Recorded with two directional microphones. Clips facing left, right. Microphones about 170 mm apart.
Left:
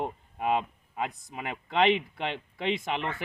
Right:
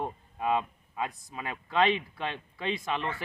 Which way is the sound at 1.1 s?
20° left (ahead or behind).